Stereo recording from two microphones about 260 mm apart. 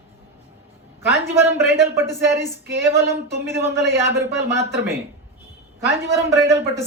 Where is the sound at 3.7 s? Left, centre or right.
Right.